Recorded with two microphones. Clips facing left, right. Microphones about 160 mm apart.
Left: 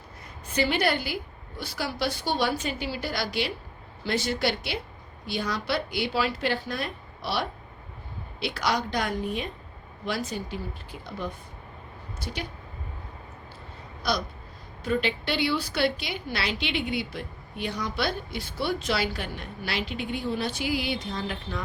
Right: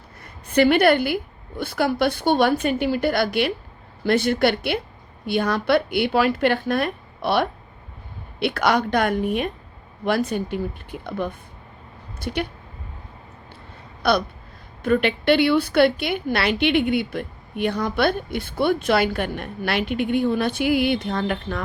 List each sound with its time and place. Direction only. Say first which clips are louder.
0.5 s a woman's voice: right 9 dB; 60° right (ahead or behind)
14.0 s a sound: right 8 dB; 60° right (ahead or behind)
14.8 s a woman's voice: right 9 dB; 60° right (ahead or behind)